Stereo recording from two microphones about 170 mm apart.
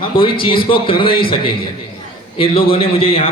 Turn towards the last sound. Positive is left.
turn(degrees=35)  # may be behind; listen again after turning